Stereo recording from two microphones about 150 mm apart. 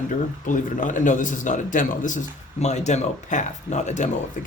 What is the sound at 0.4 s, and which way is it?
A man's voice, 60° left (ahead or behind).